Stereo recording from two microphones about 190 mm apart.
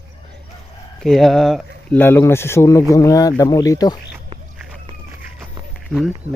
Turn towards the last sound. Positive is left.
turn(degrees=5)  # may be behind; listen again after turning